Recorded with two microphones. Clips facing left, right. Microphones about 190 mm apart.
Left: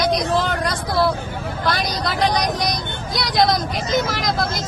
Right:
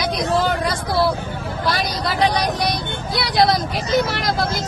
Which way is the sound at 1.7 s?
Centre (ahead or behind).